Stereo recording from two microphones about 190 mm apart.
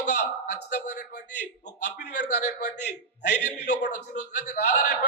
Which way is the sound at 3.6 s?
60° left (ahead or behind).